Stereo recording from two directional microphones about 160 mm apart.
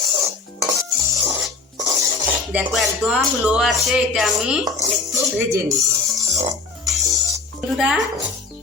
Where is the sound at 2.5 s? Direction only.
10° right (ahead or behind).